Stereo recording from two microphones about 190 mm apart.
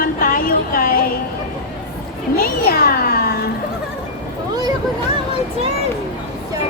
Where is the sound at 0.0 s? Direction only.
50° left (ahead or behind).